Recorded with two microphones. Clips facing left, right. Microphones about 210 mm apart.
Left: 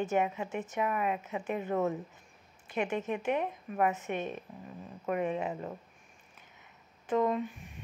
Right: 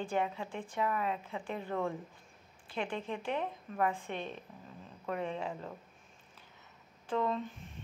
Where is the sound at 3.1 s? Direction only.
10° left (ahead or behind).